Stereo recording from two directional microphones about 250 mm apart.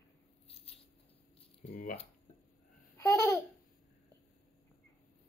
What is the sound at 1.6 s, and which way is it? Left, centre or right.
Speech, left.